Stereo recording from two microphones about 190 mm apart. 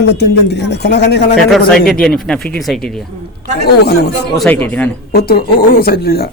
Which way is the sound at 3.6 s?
55° left (ahead or behind).